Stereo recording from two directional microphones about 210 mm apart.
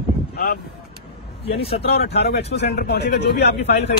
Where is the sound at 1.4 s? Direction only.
25° left (ahead or behind).